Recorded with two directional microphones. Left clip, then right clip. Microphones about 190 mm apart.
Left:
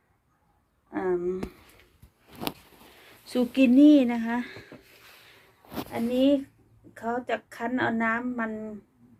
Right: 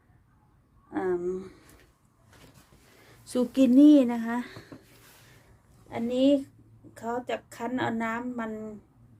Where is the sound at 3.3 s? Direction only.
20° right (ahead or behind).